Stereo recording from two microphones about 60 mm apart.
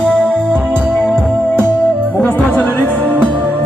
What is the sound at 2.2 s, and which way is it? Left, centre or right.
Music, left.